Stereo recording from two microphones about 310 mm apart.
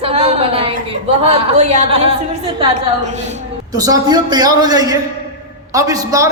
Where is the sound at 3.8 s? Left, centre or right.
Centre.